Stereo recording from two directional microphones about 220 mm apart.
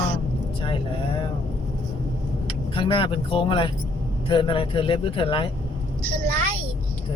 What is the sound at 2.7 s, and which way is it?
Speech, 25° left (ahead or behind).